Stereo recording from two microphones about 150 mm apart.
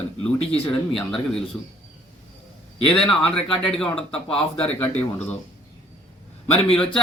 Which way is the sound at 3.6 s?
5° left (ahead or behind).